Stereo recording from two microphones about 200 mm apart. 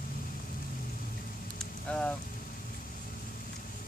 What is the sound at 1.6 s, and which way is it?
Vehicle, 5° left (ahead or behind).